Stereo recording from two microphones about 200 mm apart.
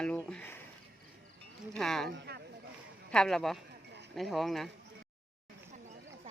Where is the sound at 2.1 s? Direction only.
55° right (ahead or behind).